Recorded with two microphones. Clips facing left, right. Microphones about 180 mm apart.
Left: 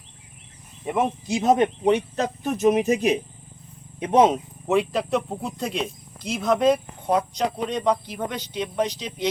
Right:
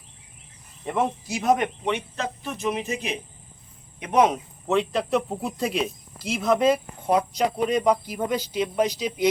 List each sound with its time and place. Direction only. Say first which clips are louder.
0.9 s speech: left 2 dB; 15° left (ahead or behind); by 3.2 s 45° left (ahead or behind)
4.0 s speech: left 3 dB; 30° left (ahead or behind)
4.6 s speech: left 1 dB; 10° left (ahead or behind); by 9.3 s 10° right (ahead or behind)